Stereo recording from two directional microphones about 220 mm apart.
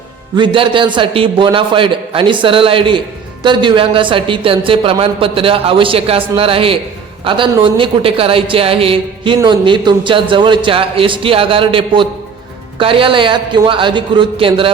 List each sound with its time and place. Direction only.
0.3 s a man's voice: 20° right (ahead or behind)